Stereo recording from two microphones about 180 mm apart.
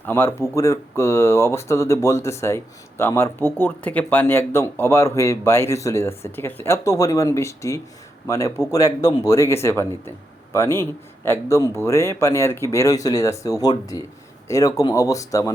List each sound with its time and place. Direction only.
0.0 s speech: 15° left (ahead or behind)